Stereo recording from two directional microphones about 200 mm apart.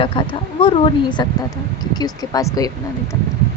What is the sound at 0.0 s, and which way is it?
Speech, 25° left (ahead or behind).